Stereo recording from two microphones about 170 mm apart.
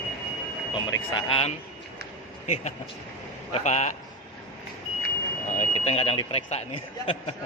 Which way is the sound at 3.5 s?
40° left (ahead or behind).